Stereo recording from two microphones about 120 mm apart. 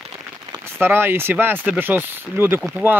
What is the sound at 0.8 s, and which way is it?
Speech, 20° right (ahead or behind).